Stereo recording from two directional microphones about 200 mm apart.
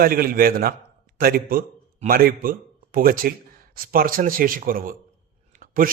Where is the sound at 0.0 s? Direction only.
45° right (ahead or behind).